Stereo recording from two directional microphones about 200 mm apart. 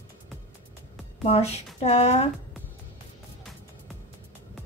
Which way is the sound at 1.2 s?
30° left (ahead or behind).